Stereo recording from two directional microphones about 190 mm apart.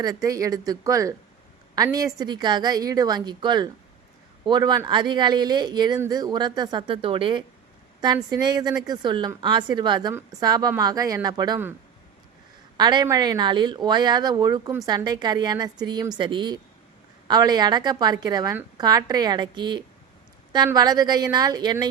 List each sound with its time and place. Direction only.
0.0 s a woman's voice: 20° right (ahead or behind)
12.7 s speech: 20° right (ahead or behind)